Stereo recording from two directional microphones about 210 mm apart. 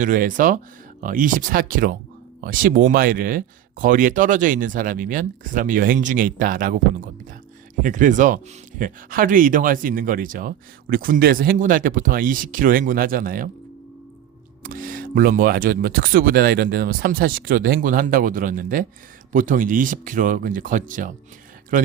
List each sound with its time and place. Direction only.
0.0 s speech: 40° right (ahead or behind)
14.6 s speech: 40° right (ahead or behind)